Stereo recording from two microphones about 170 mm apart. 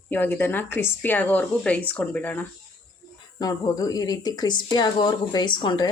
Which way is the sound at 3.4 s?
20° left (ahead or behind).